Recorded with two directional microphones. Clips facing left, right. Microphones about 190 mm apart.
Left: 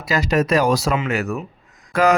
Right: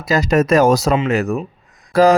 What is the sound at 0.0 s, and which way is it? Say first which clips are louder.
Speech: right 4 dB; 40° right (ahead or behind).